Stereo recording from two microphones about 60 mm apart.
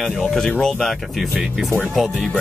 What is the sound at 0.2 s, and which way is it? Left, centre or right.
Speech, centre.